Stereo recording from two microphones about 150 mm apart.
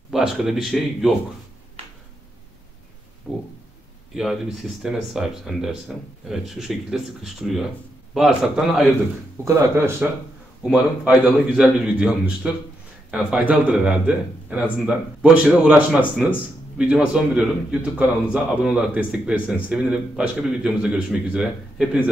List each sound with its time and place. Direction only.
0.1 s a man's voice: centre (ahead or behind)
3.3 s a man's voice: centre (ahead or behind)
9.4 s a man's voice: 15° right (ahead or behind)
10.6 s a man's voice: 5° right (ahead or behind)